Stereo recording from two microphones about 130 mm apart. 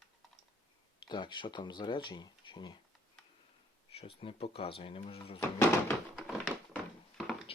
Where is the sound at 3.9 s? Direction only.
45° left (ahead or behind).